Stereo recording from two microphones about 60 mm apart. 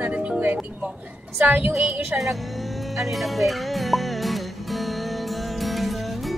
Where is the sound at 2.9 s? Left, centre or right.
Centre.